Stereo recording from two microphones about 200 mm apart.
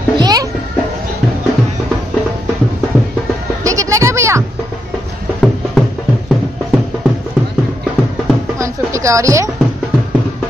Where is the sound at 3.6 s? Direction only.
15° right (ahead or behind).